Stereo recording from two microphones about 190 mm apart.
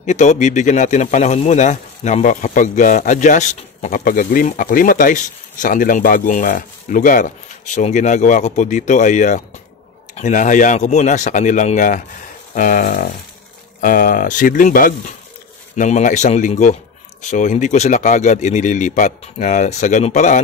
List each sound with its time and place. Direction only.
0.0 s speech: 40° left (ahead or behind)